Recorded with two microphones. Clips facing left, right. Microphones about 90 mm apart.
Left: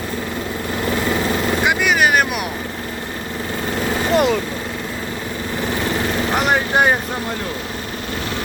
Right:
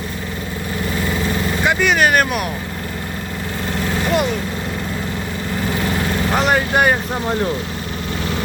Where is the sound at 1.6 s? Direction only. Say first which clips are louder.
Right 2 dB; 10° left (ahead or behind).